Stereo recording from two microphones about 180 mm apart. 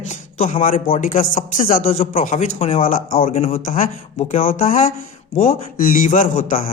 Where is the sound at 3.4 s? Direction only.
35° left (ahead or behind).